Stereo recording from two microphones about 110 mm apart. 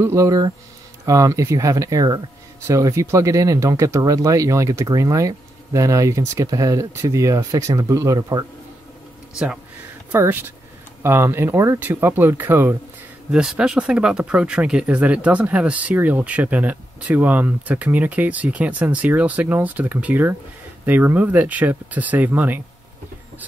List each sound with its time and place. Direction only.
0.0 s speech: 30° right (ahead or behind)
10.1 s speech: 20° right (ahead or behind)
13.3 s speech: 5° right (ahead or behind)